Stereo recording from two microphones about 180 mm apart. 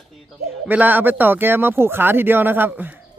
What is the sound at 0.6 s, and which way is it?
Speech, 10° right (ahead or behind).